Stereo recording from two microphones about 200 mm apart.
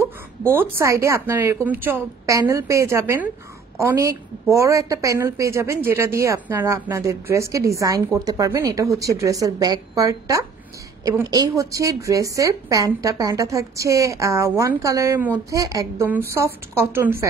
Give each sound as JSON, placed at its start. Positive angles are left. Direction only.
{"t": 0.0, "sound": "a woman's voice", "side_deg": -10}